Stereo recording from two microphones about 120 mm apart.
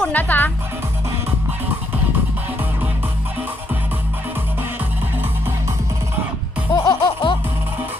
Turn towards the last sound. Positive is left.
turn(degrees=40)  # may be behind; listen again after turning